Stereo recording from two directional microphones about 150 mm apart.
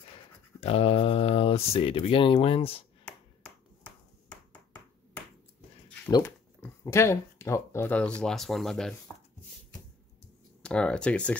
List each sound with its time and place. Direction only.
0.6 s speech: 40° left (ahead or behind)
3.1 s finger snapping: 10° left (ahead or behind)
6.0 s speech: 20° left (ahead or behind); by 8.9 s 5° left (ahead or behind)
10.6 s speech: 5° left (ahead or behind)